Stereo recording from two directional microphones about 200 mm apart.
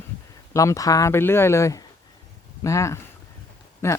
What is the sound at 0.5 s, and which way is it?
Speech, 15° left (ahead or behind).